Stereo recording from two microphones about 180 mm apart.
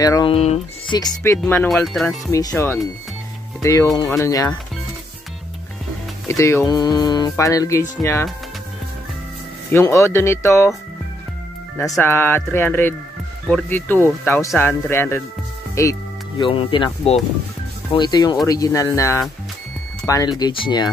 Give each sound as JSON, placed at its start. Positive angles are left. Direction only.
{"t": 0.0, "sound": "speech", "side_deg": 20}
{"t": 0.3, "sound": "speech", "side_deg": 35}
{"t": 0.9, "sound": "speech", "side_deg": 20}
{"t": 1.7, "sound": "speech", "side_deg": 0}
{"t": 2.5, "sound": "speech", "side_deg": 15}
{"t": 6.2, "sound": "speech", "side_deg": 15}
{"t": 9.7, "sound": "speech", "side_deg": 15}
{"t": 12.0, "sound": "speech", "side_deg": 10}
{"t": 15.7, "sound": "music", "side_deg": 15}
{"t": 16.4, "sound": "speech", "side_deg": 30}